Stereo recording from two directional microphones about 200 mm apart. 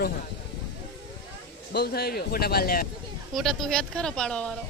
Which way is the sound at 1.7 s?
55° left (ahead or behind).